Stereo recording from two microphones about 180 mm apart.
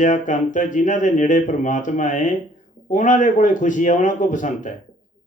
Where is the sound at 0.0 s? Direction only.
45° left (ahead or behind).